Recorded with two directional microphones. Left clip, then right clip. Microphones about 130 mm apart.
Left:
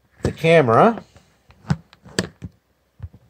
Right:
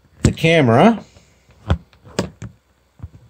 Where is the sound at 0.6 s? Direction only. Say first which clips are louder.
Right 1 dB; 10° right (ahead or behind).